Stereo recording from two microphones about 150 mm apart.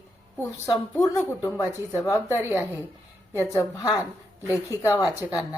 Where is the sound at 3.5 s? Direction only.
25° left (ahead or behind).